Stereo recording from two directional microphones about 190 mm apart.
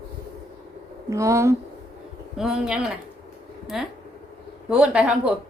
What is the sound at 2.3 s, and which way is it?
Speech, centre (ahead or behind).